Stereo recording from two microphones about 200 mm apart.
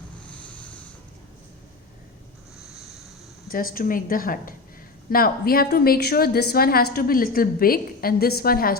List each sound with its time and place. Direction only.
3.5 s a woman's voice: 45° left (ahead or behind)